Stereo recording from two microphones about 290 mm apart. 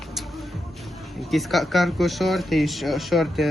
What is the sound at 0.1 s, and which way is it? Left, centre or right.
Music, centre.